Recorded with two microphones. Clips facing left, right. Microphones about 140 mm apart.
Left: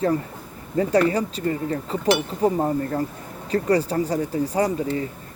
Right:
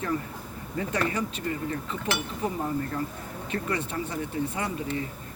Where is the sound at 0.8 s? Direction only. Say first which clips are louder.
Left 9 dB; 35° left (ahead or behind).